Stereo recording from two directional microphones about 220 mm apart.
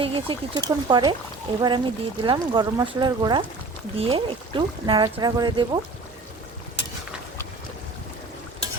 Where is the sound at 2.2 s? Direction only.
20° right (ahead or behind).